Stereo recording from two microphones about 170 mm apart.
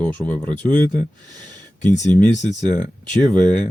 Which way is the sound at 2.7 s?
10° left (ahead or behind).